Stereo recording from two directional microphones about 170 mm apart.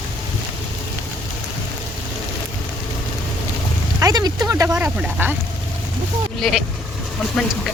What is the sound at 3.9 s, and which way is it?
Speech, 20° right (ahead or behind).